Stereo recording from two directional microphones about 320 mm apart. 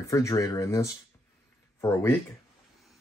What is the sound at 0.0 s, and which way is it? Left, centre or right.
Speech, centre.